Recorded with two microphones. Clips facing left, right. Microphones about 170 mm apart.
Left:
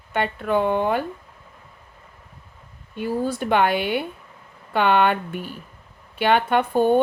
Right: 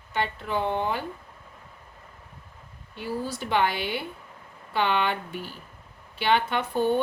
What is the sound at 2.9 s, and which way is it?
A woman's voice, 55° left (ahead or behind).